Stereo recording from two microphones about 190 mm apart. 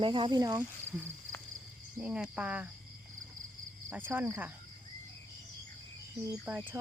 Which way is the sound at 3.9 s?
10° right (ahead or behind).